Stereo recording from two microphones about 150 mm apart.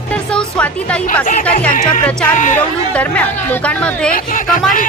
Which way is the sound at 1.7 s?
65° left (ahead or behind).